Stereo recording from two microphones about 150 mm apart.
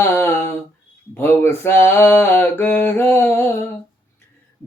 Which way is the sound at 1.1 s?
15° left (ahead or behind).